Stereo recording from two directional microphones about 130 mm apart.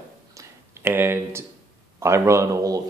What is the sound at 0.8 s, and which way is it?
Speech, 15° right (ahead or behind).